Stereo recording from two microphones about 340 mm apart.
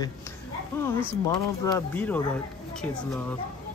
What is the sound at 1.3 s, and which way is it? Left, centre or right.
Speech, centre.